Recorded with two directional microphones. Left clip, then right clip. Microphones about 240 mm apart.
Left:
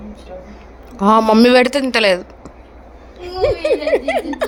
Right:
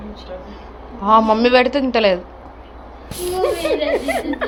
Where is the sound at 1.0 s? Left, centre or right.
Left.